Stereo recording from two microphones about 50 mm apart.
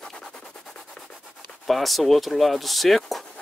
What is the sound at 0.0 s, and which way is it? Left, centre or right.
Music, centre.